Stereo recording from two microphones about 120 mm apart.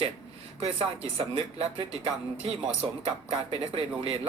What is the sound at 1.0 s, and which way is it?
Speech, 50° right (ahead or behind).